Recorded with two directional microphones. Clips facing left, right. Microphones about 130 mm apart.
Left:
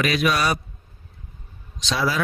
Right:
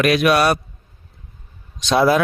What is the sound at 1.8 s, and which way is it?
Speech, 55° right (ahead or behind).